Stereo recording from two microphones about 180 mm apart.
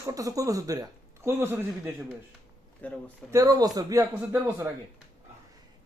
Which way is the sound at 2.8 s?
10° left (ahead or behind).